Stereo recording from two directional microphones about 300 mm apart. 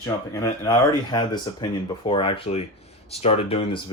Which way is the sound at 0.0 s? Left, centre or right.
Centre.